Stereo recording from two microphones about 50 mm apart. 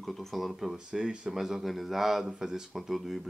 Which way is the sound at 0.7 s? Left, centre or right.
Centre.